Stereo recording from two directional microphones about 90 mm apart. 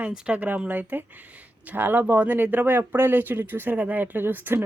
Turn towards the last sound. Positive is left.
turn(degrees=-25)  # may be behind; listen again after turning